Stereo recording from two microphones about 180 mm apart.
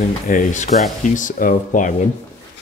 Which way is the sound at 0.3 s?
45° left (ahead or behind).